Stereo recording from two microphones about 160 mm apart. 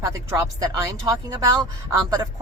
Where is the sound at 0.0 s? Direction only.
20° right (ahead or behind).